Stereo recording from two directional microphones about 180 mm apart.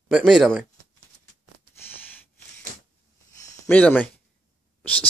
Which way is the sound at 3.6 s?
10° left (ahead or behind).